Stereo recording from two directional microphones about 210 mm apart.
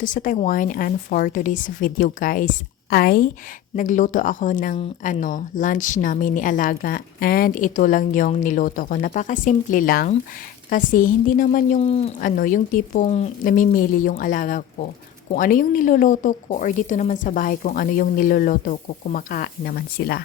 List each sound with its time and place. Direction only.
0.0 s speech: 40° left (ahead or behind)